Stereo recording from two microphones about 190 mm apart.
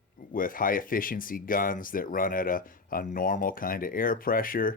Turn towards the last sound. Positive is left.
turn(degrees=45)  # may be behind; listen again after turning